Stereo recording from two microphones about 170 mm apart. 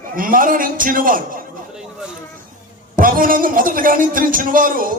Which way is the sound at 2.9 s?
55° right (ahead or behind).